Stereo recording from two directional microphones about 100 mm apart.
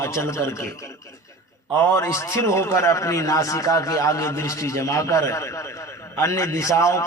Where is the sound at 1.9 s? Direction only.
30° left (ahead or behind).